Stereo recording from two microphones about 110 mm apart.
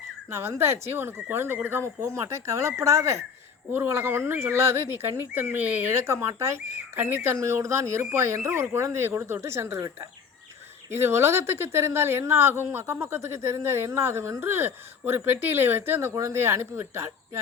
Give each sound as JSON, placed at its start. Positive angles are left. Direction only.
{"t": 0.3, "sound": "speech", "side_deg": -25}
{"t": 10.9, "sound": "speech", "side_deg": -20}